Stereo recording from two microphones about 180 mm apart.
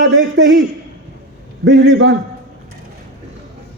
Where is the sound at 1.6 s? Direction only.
70° right (ahead or behind).